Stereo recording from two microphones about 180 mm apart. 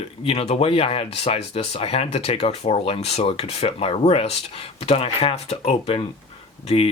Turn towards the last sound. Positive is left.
turn(degrees=30)  # may be behind; listen again after turning